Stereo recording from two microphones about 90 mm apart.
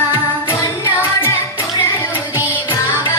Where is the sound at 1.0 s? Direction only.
25° left (ahead or behind).